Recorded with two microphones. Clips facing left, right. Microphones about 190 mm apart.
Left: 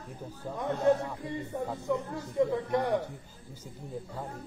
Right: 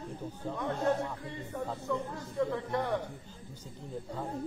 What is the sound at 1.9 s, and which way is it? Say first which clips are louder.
Speech: left 5 dB; 20° left (ahead or behind).